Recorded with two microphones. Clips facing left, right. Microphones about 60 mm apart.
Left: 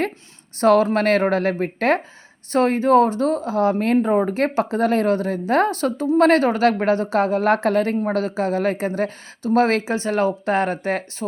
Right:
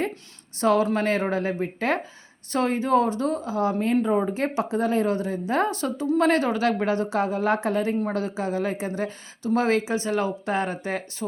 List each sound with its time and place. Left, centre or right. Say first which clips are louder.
0.6 s speech: left 6 dB; left
0.9 s speech: left 6 dB; left
3.9 s speech: left 4 dB; left
4.4 s speech: left 5 dB; left